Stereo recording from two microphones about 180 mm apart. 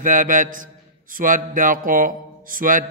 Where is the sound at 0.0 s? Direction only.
45° right (ahead or behind).